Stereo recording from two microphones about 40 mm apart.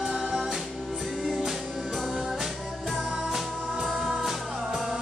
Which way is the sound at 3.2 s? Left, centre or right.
Centre.